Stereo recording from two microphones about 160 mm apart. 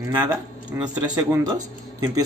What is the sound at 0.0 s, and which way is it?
Speech, 25° right (ahead or behind).